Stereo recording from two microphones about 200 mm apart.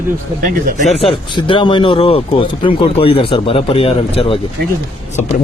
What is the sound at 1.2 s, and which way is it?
Speech, 25° left (ahead or behind).